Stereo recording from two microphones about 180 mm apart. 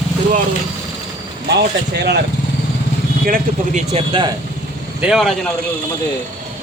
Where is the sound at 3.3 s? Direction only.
40° right (ahead or behind).